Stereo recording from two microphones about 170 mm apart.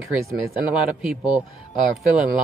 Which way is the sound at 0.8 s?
5° right (ahead or behind).